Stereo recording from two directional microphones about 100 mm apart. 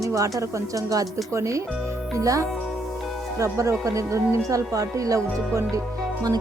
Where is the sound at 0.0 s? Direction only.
35° right (ahead or behind).